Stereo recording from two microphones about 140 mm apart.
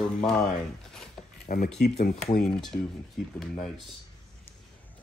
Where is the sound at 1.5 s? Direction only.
70° left (ahead or behind).